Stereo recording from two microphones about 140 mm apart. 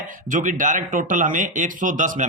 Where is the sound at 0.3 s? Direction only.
70° right (ahead or behind).